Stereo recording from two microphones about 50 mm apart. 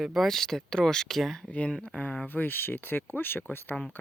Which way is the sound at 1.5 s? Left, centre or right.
Left.